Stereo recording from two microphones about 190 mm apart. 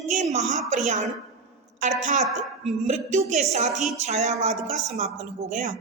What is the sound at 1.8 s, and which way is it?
A woman's voice, 40° right (ahead or behind).